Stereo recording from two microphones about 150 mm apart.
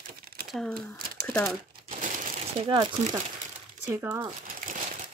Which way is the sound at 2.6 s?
30° right (ahead or behind).